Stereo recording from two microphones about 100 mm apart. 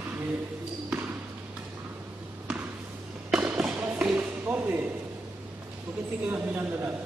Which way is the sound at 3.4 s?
20° right (ahead or behind).